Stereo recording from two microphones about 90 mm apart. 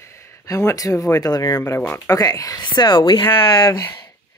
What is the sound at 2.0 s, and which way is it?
Speech, 40° left (ahead or behind).